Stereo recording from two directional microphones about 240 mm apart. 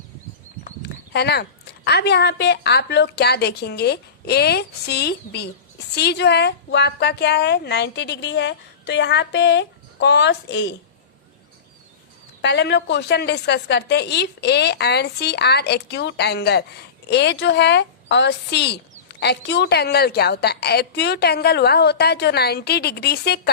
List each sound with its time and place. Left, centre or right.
0.6 s a woman's voice: left
12.4 s a woman's voice: left